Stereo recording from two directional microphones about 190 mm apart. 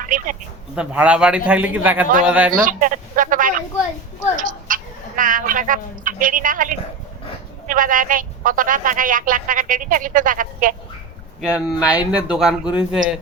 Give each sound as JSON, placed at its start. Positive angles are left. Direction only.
{"t": 0.0, "sound": "speech", "side_deg": -45}
{"t": 0.8, "sound": "a man's voice", "side_deg": -5}
{"t": 2.6, "sound": "a woman's voice", "side_deg": -45}
{"t": 11.3, "sound": "a man's voice", "side_deg": -5}